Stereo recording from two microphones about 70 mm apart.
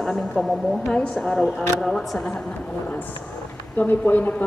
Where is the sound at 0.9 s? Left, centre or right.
Centre.